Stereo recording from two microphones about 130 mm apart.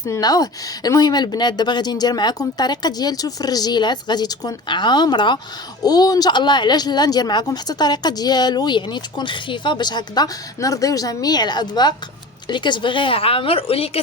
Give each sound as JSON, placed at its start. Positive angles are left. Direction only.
{"t": 0.0, "sound": "speech", "side_deg": 30}